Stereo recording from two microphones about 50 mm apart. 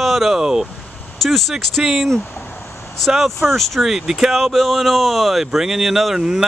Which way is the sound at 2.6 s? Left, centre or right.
Left.